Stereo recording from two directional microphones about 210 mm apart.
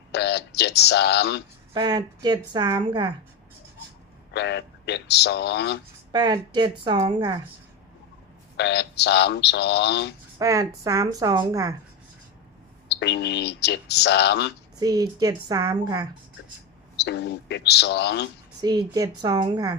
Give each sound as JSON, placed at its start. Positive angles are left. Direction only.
{"t": 0.1, "sound": "speech", "side_deg": 55}
{"t": 1.7, "sound": "a woman's voice", "side_deg": -20}
{"t": 4.3, "sound": "speech", "side_deg": 55}
{"t": 6.1, "sound": "a woman's voice", "side_deg": -20}
{"t": 8.5, "sound": "speech", "side_deg": 55}
{"t": 10.3, "sound": "a woman's voice", "side_deg": -15}
{"t": 12.9, "sound": "speech", "side_deg": 55}
{"t": 14.8, "sound": "a woman's voice", "side_deg": -20}
{"t": 17.0, "sound": "speech", "side_deg": 55}
{"t": 18.6, "sound": "a woman's voice", "side_deg": -20}